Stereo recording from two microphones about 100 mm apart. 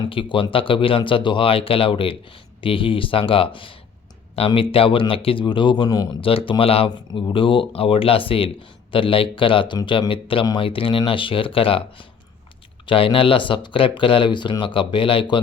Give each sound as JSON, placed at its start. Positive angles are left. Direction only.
{"t": 0.1, "sound": "speech", "side_deg": 60}
{"t": 6.1, "sound": "speech", "side_deg": 65}
{"t": 7.1, "sound": "speech", "side_deg": 55}